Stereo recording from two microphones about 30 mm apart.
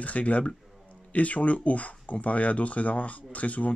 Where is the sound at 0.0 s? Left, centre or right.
Left.